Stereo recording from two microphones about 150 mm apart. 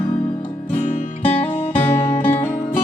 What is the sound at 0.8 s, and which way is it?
Music, 55° left (ahead or behind).